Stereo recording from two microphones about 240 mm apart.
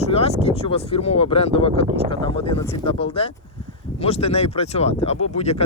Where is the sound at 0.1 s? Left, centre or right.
Left.